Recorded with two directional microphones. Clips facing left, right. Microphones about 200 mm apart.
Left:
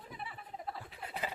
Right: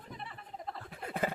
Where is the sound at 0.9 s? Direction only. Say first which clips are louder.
Right 9 dB; 50° right (ahead or behind).